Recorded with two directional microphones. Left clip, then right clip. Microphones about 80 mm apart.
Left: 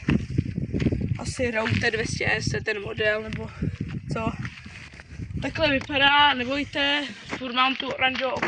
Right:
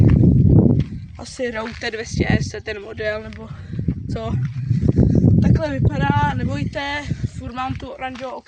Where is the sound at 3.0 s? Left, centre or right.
Right.